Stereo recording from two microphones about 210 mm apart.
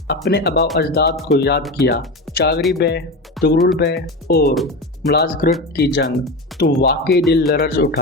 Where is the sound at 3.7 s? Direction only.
50° left (ahead or behind).